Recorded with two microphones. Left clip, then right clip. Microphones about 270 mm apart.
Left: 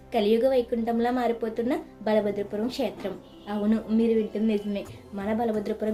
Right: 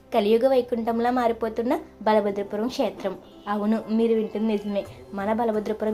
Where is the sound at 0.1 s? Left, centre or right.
Centre.